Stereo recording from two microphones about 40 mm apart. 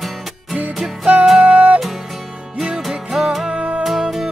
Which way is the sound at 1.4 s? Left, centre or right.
Right.